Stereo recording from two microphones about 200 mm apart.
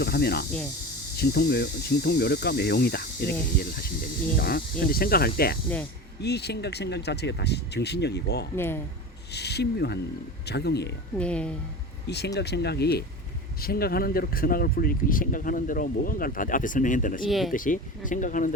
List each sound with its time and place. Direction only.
0.0 s speech: 55° left (ahead or behind)
4.4 s speech: 50° left (ahead or behind)
8.5 s speech: 10° left (ahead or behind)
9.3 s speech: 55° left (ahead or behind)
11.1 s speech: 5° left (ahead or behind)
12.0 s speech: 55° left (ahead or behind); by 17.2 s 40° left (ahead or behind)
17.2 s speech: centre (ahead or behind)
17.5 s speech: 40° left (ahead or behind)